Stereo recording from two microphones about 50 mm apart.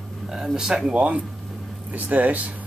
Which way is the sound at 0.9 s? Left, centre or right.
Right.